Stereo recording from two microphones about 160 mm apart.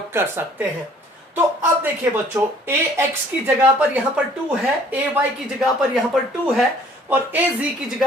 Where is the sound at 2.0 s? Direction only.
10° right (ahead or behind).